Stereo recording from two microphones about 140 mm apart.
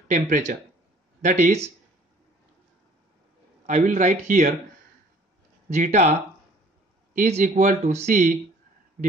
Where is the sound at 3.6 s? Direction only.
60° right (ahead or behind).